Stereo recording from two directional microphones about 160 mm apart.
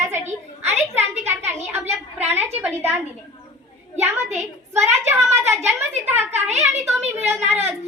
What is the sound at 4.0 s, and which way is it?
Speech, 15° right (ahead or behind).